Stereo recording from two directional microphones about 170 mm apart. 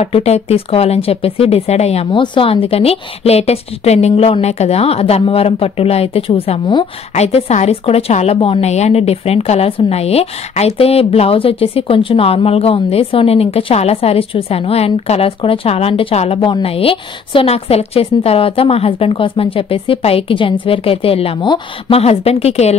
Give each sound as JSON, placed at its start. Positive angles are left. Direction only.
{"t": 0.0, "sound": "a woman's voice", "side_deg": 40}